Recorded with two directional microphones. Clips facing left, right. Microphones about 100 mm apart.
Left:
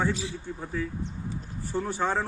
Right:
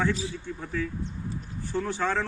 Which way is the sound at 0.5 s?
25° left (ahead or behind).